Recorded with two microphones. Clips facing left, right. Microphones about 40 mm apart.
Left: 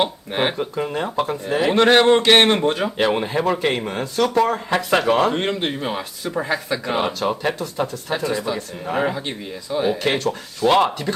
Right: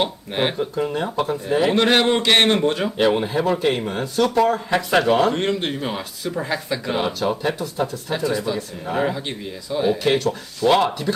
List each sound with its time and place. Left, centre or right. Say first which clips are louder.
0.0 s speech: left 1 dB; centre
2.3 s speech: left 2 dB; centre
3.8 s speech: even; centre
8.3 s speech: even; centre